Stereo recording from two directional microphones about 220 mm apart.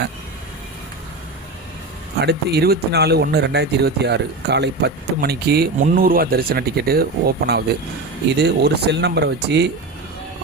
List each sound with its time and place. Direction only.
2.2 s speech: 45° right (ahead or behind)